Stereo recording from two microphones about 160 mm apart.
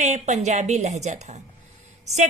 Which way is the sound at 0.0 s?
45° right (ahead or behind).